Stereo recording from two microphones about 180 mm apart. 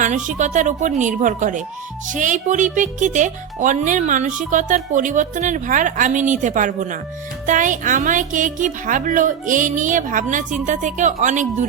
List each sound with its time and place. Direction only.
0.0 s speech: 45° right (ahead or behind)